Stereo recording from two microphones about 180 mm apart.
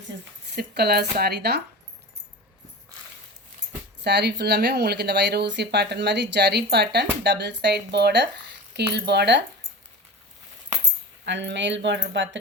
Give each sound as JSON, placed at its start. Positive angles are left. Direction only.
{"t": 0.5, "sound": "speech", "side_deg": -60}
{"t": 4.0, "sound": "speech", "side_deg": -70}
{"t": 11.3, "sound": "speech", "side_deg": -80}